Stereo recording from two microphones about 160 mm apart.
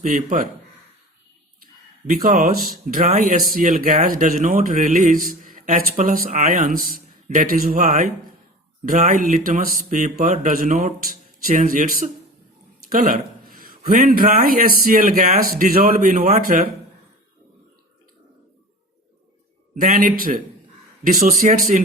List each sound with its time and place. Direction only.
0.0 s speech: 60° right (ahead or behind)
1.6 s a sound: 65° right (ahead or behind)
2.8 s a man's voice: 55° right (ahead or behind)
19.7 s speech: 60° right (ahead or behind)